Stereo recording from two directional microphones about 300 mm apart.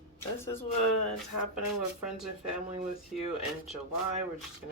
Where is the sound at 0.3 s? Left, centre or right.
Centre.